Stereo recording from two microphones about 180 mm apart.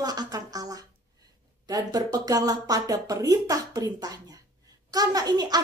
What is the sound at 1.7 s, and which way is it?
A woman's voice, 20° right (ahead or behind).